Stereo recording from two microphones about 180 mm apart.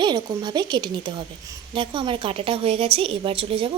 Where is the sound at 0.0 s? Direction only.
25° right (ahead or behind).